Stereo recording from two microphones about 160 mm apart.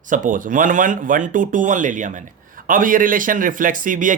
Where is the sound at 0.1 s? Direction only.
55° right (ahead or behind).